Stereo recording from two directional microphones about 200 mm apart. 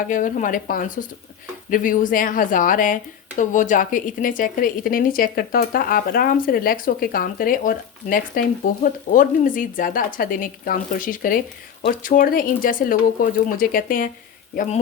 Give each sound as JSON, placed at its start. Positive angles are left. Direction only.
{"t": 0.0, "sound": "speech", "side_deg": 40}